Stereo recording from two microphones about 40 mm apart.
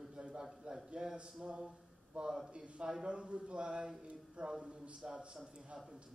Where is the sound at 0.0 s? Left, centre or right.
Right.